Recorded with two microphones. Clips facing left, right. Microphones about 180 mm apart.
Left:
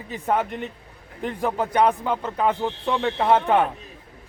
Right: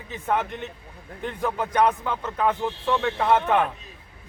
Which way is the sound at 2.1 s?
15° left (ahead or behind).